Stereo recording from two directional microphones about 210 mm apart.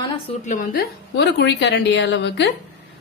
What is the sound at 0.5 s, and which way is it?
A woman's voice, 45° left (ahead or behind).